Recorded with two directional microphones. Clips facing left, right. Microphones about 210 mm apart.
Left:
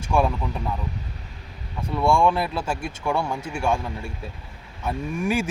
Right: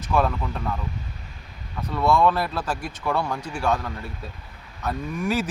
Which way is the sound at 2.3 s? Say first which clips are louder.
Left 1 dB; 25° left (ahead or behind).